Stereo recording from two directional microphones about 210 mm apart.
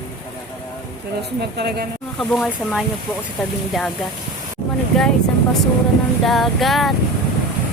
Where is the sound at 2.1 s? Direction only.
Centre (ahead or behind).